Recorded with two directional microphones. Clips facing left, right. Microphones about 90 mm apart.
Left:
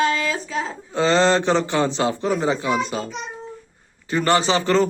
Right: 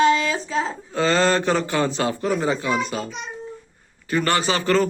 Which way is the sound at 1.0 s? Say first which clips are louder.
Left 2 dB; 25° left (ahead or behind).